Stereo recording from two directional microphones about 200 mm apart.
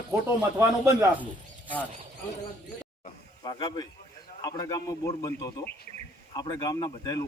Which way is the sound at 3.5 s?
20° left (ahead or behind).